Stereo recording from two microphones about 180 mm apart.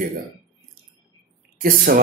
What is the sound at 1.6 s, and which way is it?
Speech, 50° right (ahead or behind).